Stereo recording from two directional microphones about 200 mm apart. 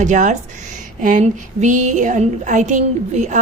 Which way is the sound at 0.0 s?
40° right (ahead or behind).